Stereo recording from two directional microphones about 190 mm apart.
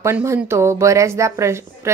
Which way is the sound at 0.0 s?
15° right (ahead or behind).